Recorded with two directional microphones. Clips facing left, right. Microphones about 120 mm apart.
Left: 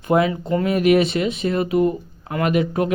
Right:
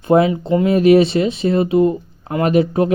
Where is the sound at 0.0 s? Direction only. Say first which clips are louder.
Right 5 dB; 30° right (ahead or behind).